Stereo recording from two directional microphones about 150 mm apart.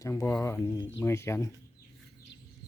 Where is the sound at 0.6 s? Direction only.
20° left (ahead or behind).